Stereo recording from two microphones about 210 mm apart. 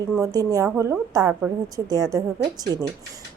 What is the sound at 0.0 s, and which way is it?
A woman's voice, 15° right (ahead or behind).